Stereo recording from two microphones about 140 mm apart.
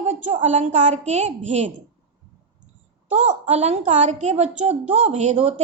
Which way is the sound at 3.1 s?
50° right (ahead or behind).